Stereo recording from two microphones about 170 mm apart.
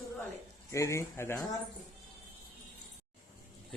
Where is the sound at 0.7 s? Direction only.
15° left (ahead or behind).